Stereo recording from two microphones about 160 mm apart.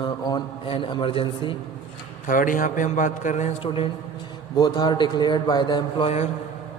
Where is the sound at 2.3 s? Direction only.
55° left (ahead or behind); by 6.1 s 30° left (ahead or behind).